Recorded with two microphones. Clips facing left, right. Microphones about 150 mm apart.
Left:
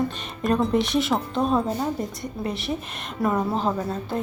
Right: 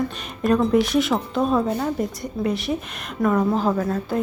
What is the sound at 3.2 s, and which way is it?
Speech, 10° left (ahead or behind).